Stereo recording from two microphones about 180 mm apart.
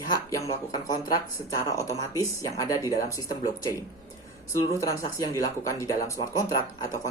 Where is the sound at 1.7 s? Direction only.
20° left (ahead or behind).